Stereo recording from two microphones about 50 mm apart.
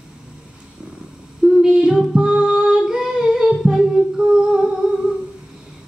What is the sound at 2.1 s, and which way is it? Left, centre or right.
Music, centre.